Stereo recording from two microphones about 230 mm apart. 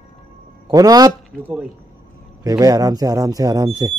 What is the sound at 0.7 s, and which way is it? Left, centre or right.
A man's voice, centre.